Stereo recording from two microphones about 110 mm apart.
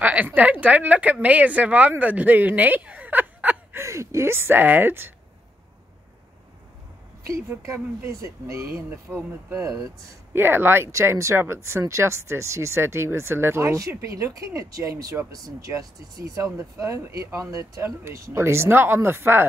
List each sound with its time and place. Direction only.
0.0 s speech: 15° right (ahead or behind)
3.8 s speech: 25° right (ahead or behind)
7.4 s speech: 25° right (ahead or behind)
10.3 s speech: 20° right (ahead or behind)